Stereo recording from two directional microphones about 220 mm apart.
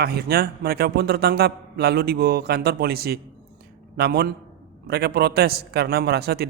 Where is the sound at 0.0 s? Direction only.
45° right (ahead or behind).